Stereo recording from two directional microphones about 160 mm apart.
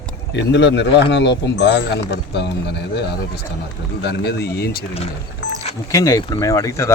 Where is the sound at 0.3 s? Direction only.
90° left.